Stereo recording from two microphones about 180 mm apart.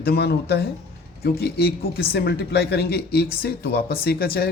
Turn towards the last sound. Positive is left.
turn(degrees=55)  # may be behind; listen again after turning